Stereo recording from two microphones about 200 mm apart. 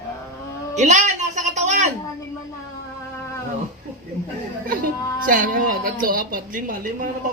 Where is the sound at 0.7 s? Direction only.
35° right (ahead or behind).